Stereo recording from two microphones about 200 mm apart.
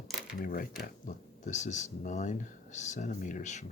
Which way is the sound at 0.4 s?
45° left (ahead or behind).